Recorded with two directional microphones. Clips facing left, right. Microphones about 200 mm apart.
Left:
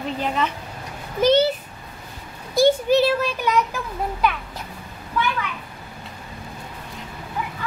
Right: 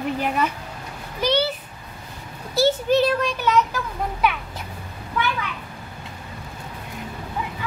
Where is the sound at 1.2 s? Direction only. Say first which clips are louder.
Left 5 dB; 50° left (ahead or behind).